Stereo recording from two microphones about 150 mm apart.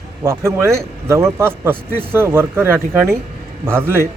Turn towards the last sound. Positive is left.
turn(degrees=-15)  # may be behind; listen again after turning